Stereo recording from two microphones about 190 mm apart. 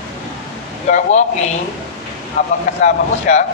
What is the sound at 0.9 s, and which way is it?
Speech, 35° left (ahead or behind).